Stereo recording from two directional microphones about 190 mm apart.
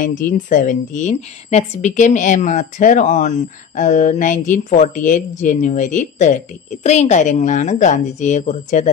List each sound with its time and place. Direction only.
0.0 s a woman's voice: 45° left (ahead or behind)